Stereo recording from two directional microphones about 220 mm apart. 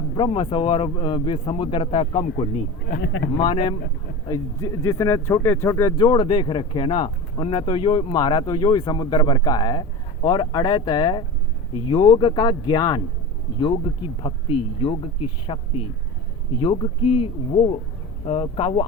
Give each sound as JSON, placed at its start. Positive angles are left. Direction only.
{"t": 0.1, "sound": "speech", "side_deg": 25}
{"t": 3.0, "sound": "speech", "side_deg": 55}
{"t": 3.3, "sound": "speech", "side_deg": 25}
{"t": 17.0, "sound": "speech", "side_deg": 90}
{"t": 18.3, "sound": "speech", "side_deg": 25}